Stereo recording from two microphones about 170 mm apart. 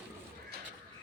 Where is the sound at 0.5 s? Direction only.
65° right (ahead or behind).